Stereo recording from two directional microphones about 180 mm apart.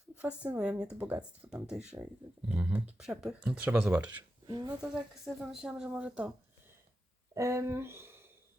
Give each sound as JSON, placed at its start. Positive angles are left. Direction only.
{"t": 0.2, "sound": "speech", "side_deg": -5}
{"t": 4.4, "sound": "speech", "side_deg": -25}
{"t": 4.8, "sound": "speech", "side_deg": -5}
{"t": 7.3, "sound": "speech", "side_deg": -15}